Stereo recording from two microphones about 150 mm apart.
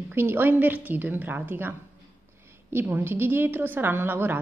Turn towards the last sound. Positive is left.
turn(degrees=-15)  # may be behind; listen again after turning